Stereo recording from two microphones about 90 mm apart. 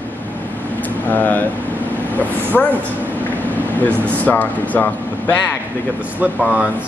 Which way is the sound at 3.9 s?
20° right (ahead or behind).